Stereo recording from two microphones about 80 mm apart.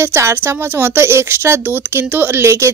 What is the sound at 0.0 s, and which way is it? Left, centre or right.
A woman's voice, right.